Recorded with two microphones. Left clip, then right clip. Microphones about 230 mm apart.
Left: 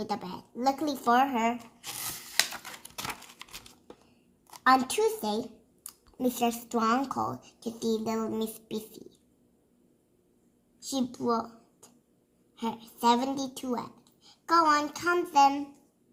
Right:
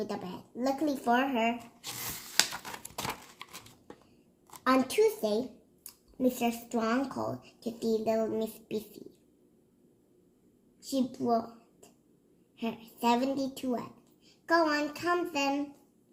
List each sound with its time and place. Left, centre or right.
0.0 s a woman's voice: left
1.8 s tearing: centre
3.0 s crumpling: centre
4.7 s a woman's voice: left
10.8 s a sound: left
12.5 s a woman's voice: left